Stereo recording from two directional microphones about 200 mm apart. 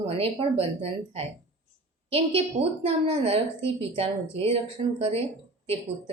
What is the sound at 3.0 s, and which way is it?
A woman's voice, 30° right (ahead or behind).